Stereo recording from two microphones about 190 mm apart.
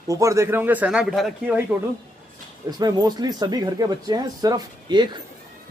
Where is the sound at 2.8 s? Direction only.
20° right (ahead or behind).